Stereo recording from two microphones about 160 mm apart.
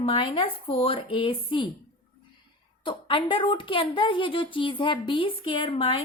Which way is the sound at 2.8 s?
30° left (ahead or behind).